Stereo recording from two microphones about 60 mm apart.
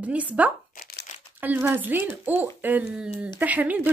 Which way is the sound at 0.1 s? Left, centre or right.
Right.